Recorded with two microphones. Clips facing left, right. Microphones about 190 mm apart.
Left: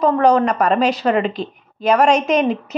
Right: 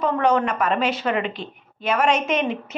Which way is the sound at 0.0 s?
35° left (ahead or behind).